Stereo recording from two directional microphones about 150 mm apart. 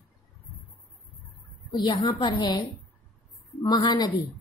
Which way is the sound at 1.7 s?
30° left (ahead or behind).